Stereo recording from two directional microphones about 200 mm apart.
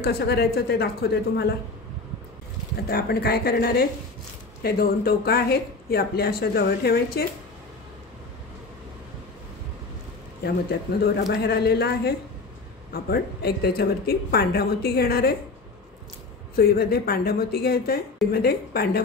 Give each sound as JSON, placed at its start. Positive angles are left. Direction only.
{"t": 0.0, "sound": "speech", "side_deg": 55}
{"t": 2.9, "sound": "speech", "side_deg": 50}
{"t": 10.4, "sound": "speech", "side_deg": 55}
{"t": 16.5, "sound": "speech", "side_deg": 50}